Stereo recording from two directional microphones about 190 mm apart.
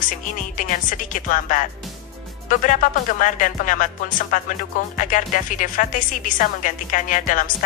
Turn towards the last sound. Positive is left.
turn(degrees=45)  # may be behind; listen again after turning